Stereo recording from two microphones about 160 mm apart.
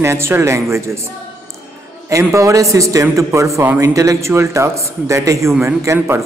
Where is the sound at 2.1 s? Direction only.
20° right (ahead or behind).